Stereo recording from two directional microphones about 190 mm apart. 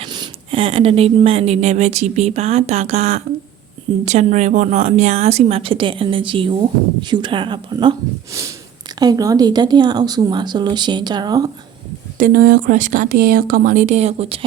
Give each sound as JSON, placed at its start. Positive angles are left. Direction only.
{"t": 0.0, "sound": "speech", "side_deg": -25}
{"t": 12.1, "sound": "speech", "side_deg": -50}